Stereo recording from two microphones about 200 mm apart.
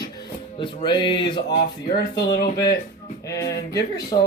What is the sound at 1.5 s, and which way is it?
Speech, 50° left (ahead or behind).